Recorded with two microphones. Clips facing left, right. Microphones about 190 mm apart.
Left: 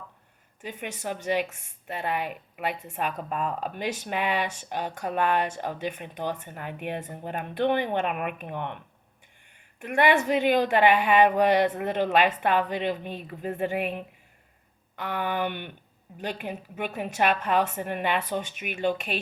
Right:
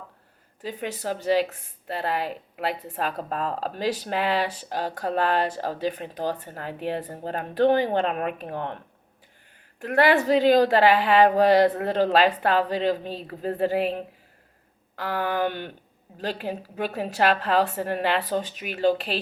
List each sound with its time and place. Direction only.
0.7 s speech: 35° right (ahead or behind)
16.3 s speech: 35° right (ahead or behind)